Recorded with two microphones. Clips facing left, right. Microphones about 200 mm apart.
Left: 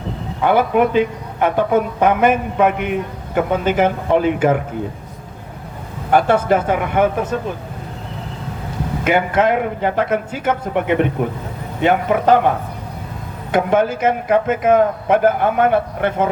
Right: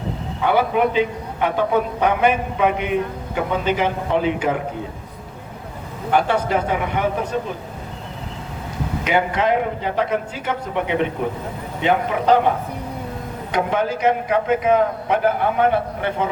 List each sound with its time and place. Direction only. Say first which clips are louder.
0.4 s a man's voice: left 3 dB; 50° left (ahead or behind)
6.1 s a man's voice: left 5 dB; 45° left (ahead or behind)
9.0 s a man's voice: left 3 dB; 50° left (ahead or behind)
13.5 s a man's voice: left 5 dB; 50° left (ahead or behind)